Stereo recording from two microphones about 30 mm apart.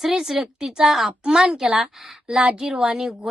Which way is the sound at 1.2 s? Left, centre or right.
Right.